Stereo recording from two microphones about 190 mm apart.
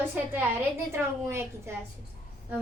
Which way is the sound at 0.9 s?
15° right (ahead or behind).